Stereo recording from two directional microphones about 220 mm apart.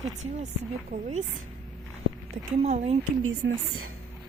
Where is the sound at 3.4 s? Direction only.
55° right (ahead or behind).